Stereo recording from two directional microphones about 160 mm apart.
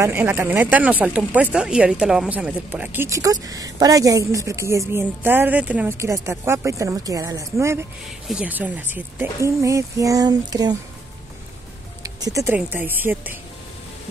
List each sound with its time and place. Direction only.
0.0 s a woman's voice: 15° right (ahead or behind)
12.0 s music: 20° right (ahead or behind)
12.5 s speech: 10° right (ahead or behind)